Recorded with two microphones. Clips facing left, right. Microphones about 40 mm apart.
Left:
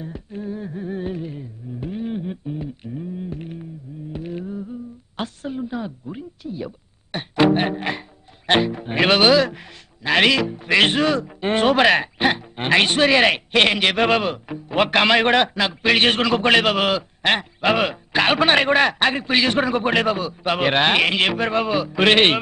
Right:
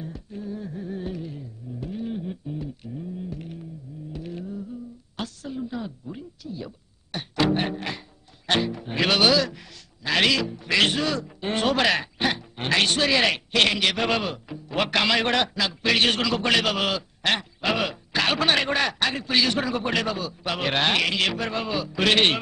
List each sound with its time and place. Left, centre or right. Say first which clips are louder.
0.0 s humming: left 4 dB; left
4.1 s a sound: left 5 dB; left
5.6 s speech: left 2 dB; left